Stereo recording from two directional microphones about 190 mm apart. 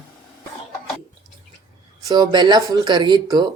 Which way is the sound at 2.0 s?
20° right (ahead or behind).